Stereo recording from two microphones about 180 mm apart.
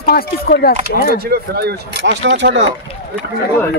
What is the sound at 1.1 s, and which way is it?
Speech, 60° right (ahead or behind).